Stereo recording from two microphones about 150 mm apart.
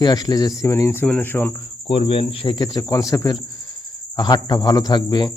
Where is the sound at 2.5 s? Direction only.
25° left (ahead or behind).